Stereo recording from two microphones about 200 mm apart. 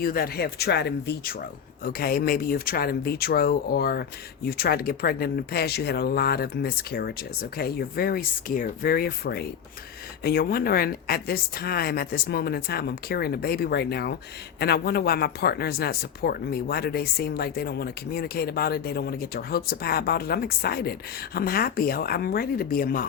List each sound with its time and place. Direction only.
0.0 s speech: 50° left (ahead or behind)